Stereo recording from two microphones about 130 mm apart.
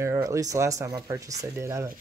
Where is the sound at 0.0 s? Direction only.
25° right (ahead or behind).